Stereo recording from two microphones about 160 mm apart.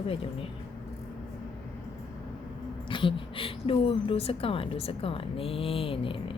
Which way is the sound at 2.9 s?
30° left (ahead or behind).